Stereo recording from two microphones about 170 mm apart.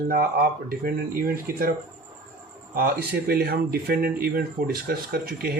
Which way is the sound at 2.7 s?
60° right (ahead or behind).